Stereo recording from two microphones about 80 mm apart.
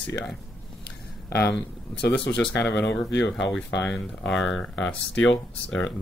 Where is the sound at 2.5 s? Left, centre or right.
Left.